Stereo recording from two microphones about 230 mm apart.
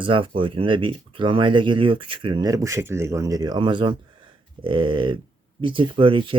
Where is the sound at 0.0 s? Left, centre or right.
Right.